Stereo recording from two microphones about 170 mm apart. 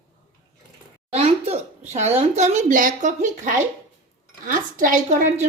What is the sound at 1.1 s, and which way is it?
A woman's voice, 40° right (ahead or behind).